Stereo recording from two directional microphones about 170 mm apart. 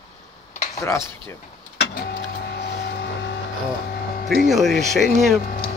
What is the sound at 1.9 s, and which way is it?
Power windows, 65° left (ahead or behind).